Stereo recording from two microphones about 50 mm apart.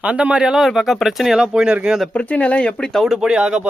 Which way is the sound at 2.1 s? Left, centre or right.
Left.